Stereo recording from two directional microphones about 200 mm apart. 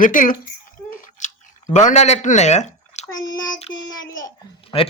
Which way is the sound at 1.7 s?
35° left (ahead or behind).